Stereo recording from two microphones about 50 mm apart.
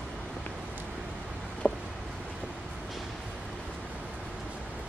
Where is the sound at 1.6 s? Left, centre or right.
Left.